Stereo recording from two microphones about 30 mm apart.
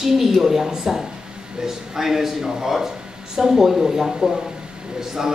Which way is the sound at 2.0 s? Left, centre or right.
Centre.